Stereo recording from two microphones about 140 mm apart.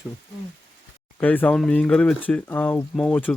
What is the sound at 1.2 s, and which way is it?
Speech, 10° left (ahead or behind).